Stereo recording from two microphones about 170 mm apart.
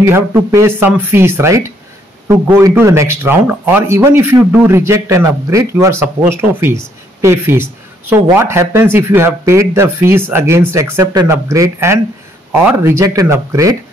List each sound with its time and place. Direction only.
0.0 s speech: 15° right (ahead or behind)